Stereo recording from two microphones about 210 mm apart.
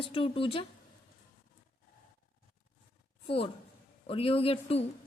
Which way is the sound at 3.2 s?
25° left (ahead or behind).